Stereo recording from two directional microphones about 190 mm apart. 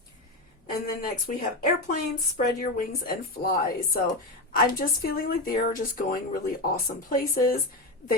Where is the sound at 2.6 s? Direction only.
50° left (ahead or behind).